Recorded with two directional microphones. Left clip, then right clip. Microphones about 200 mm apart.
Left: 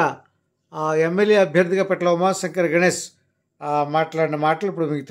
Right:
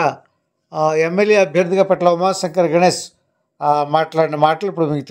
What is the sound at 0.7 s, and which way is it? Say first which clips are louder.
A man's voice: right 4 dB; 20° right (ahead or behind).